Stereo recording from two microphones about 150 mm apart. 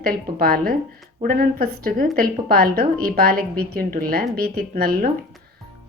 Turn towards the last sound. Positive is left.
turn(degrees=-80)